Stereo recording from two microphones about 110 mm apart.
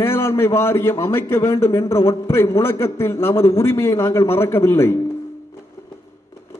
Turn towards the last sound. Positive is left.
turn(degrees=20)  # may be behind; listen again after turning